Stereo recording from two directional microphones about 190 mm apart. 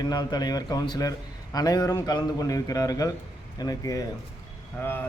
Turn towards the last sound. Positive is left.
turn(degrees=10)  # may be behind; listen again after turning